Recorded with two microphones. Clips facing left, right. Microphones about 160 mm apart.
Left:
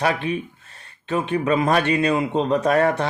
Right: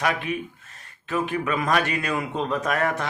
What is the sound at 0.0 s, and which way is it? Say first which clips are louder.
Speech: left 3 dB; 30° left (ahead or behind).